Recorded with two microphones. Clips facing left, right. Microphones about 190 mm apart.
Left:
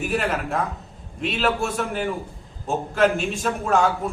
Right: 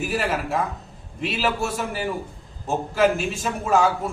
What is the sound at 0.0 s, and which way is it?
A man's voice, centre (ahead or behind).